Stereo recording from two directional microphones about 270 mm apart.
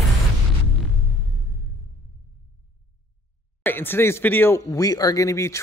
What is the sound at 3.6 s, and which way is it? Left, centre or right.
Speech, centre.